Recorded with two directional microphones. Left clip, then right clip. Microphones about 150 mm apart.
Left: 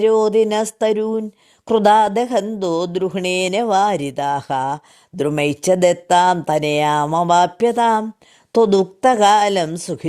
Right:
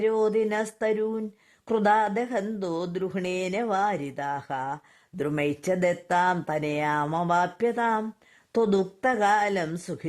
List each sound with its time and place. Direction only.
0.0 s speech: 30° left (ahead or behind)